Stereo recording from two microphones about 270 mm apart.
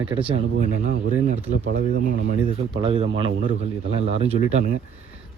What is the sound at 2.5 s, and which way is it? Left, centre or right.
A man's voice, centre.